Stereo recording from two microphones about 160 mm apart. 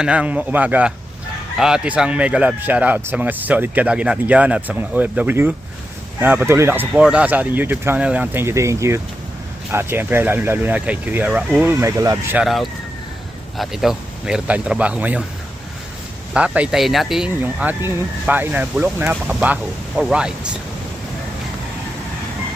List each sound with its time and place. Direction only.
0.0 s speech: 5° right (ahead or behind)
11.6 s speech: 15° right (ahead or behind)
12.4 s speech: centre (ahead or behind)
16.3 s speech: 5° right (ahead or behind)